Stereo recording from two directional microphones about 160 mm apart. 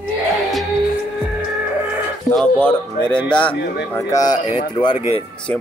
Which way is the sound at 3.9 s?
20° left (ahead or behind).